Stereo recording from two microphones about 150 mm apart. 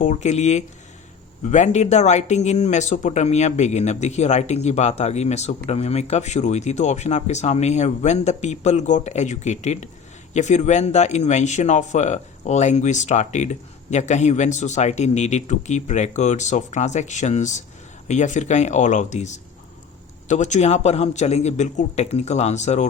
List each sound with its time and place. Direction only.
0.0 s speech: 50° left (ahead or behind)